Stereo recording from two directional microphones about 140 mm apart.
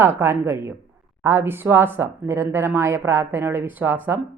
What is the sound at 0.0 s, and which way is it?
Speech, 15° right (ahead or behind).